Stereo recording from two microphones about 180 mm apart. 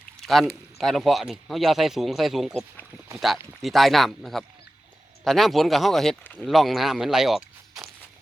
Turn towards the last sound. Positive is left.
turn(degrees=0)  # may be behind; listen again after turning